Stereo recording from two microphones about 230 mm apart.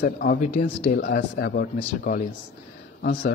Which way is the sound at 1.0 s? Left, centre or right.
Left.